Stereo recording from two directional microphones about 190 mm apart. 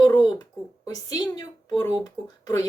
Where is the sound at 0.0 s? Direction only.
20° left (ahead or behind).